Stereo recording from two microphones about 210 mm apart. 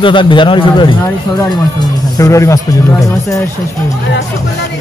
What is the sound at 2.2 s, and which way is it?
Speech, 15° left (ahead or behind).